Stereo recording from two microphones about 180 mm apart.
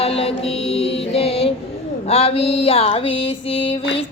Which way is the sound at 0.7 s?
35° left (ahead or behind).